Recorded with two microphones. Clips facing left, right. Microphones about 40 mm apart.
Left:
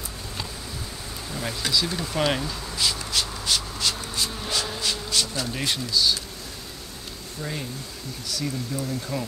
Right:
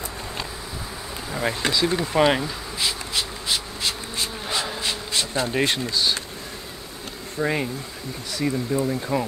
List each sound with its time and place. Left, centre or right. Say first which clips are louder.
1.3 s bee: right 3 dB; right
7.3 s speech: right 9 dB; right
8.3 s speech: right 6 dB; right